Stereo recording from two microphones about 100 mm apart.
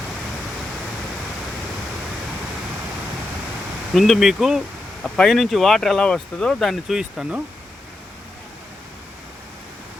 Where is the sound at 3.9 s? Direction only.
Centre (ahead or behind).